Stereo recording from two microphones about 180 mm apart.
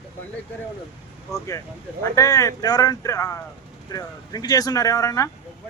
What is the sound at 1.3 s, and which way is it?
Speech, 20° left (ahead or behind).